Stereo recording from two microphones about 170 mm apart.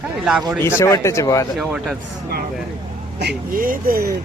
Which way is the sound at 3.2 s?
65° right (ahead or behind).